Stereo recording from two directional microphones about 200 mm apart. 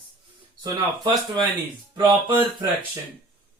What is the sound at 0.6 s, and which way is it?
Mantra, 20° right (ahead or behind).